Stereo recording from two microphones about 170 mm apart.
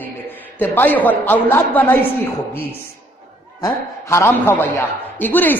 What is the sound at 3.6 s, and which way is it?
A man's voice, 15° left (ahead or behind).